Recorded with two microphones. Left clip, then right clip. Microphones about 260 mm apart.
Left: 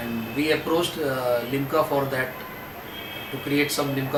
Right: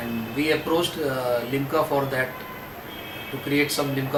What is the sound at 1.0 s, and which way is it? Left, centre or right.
Speech, centre.